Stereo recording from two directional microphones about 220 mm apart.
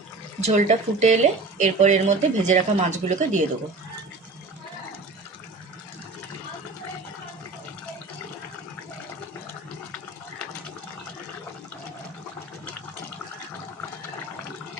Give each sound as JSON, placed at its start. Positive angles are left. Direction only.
{"t": 0.4, "sound": "speech", "side_deg": -30}